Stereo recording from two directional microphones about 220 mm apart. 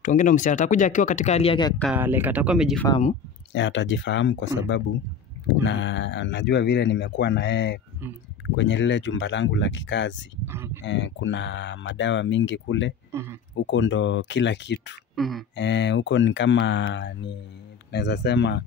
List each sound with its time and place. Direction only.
0.0 s speech: 35° left (ahead or behind)
2.0 s speech: 10° right (ahead or behind)
3.5 s speech: 55° left (ahead or behind)
5.5 s speech: 55° left (ahead or behind)
10.4 s speech: 10° right (ahead or behind)
10.9 s speech: 55° left (ahead or behind)
13.1 s speech: 10° right (ahead or behind)
13.6 s speech: 55° left (ahead or behind)
15.1 s beatboxing: centre (ahead or behind)
15.5 s speech: 55° left (ahead or behind)